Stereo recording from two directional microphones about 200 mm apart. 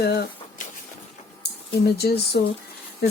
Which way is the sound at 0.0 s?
55° left (ahead or behind).